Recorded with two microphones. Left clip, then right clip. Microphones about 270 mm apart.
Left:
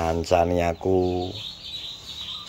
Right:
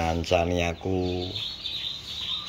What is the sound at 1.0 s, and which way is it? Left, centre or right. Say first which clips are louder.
Bird: left 6 dB; left.